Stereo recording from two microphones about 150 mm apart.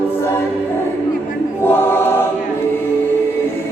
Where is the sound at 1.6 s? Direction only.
15° left (ahead or behind).